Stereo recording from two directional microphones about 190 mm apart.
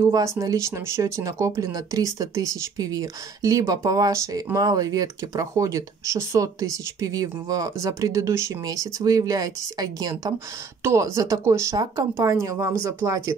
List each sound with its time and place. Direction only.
0.0 s speech: 15° right (ahead or behind)